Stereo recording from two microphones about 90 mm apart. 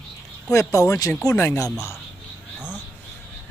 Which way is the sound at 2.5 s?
10° right (ahead or behind).